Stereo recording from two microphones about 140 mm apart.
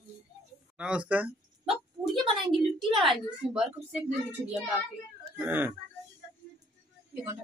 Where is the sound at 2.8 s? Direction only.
Centre (ahead or behind).